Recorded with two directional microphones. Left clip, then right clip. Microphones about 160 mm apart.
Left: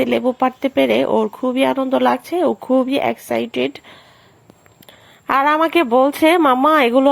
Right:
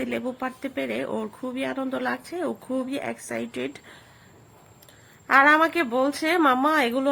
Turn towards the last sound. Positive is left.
turn(degrees=35)  # may be behind; listen again after turning